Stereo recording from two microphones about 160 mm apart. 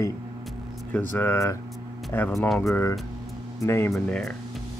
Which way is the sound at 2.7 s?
20° left (ahead or behind).